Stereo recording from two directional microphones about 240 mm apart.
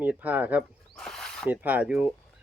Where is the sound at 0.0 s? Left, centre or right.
Centre.